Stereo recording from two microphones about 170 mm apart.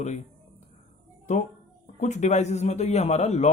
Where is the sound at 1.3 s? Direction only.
45° left (ahead or behind).